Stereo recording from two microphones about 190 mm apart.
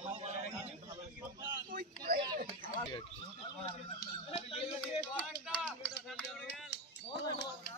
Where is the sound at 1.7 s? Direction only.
50° right (ahead or behind).